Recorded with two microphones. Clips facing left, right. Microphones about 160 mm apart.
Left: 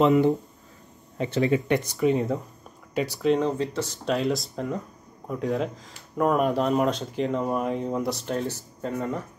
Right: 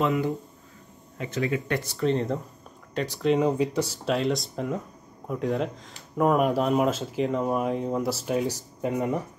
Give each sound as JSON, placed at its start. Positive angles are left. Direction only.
{"t": 1.1, "sound": "speech", "side_deg": 30}
{"t": 3.4, "sound": "speech", "side_deg": -15}